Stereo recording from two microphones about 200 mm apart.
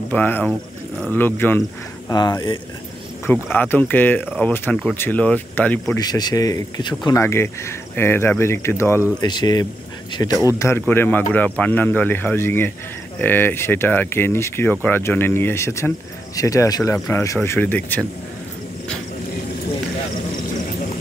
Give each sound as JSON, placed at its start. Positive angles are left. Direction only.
{"t": 0.1, "sound": "speech", "side_deg": 10}
{"t": 0.5, "sound": "speech", "side_deg": -10}
{"t": 1.1, "sound": "speech", "side_deg": 10}
{"t": 3.3, "sound": "speech", "side_deg": 10}
{"t": 5.9, "sound": "speech", "side_deg": 20}